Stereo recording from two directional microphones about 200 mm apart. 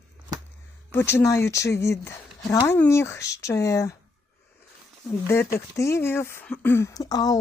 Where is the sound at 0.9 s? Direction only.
10° left (ahead or behind).